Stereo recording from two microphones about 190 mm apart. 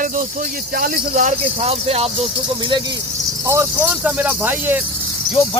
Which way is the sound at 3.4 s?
15° right (ahead or behind).